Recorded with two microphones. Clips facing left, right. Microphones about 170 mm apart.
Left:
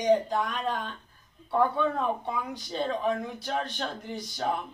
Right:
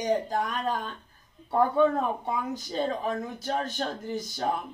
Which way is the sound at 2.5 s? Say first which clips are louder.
Right 1 dB; 45° right (ahead or behind).